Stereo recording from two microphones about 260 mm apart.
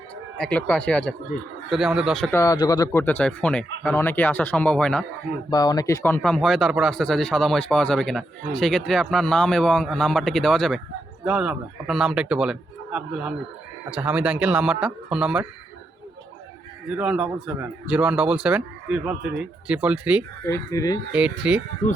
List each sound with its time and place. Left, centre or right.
0.3 s speech: centre
5.5 s speech: centre
17.0 s speech: centre
20.4 s speech: centre
21.1 s speech: centre